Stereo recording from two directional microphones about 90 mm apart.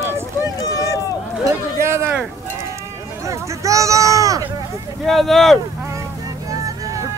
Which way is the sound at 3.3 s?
35° right (ahead or behind).